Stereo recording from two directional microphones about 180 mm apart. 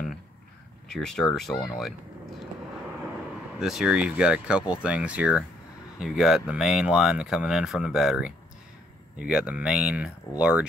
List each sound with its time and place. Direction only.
0.9 s speech: centre (ahead or behind)
3.5 s speech: 5° right (ahead or behind)